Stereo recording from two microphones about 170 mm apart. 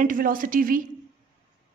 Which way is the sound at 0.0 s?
55° right (ahead or behind).